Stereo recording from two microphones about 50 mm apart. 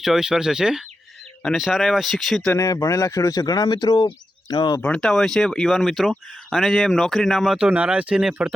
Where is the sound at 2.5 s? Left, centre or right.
Left.